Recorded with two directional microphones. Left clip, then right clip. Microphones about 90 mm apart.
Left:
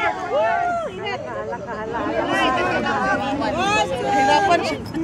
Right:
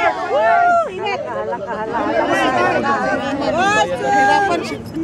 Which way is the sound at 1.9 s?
45° right (ahead or behind).